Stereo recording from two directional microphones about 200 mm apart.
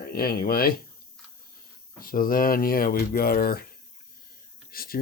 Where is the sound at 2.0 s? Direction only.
45° left (ahead or behind).